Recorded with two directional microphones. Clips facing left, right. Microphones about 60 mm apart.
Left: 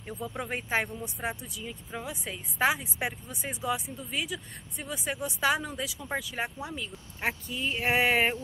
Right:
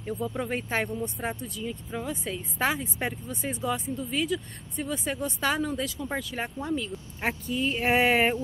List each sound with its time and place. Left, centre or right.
0.0 s speech: centre